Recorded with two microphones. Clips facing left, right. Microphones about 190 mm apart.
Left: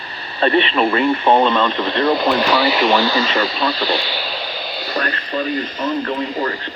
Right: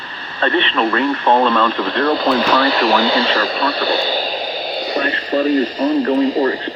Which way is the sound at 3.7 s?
55° right (ahead or behind).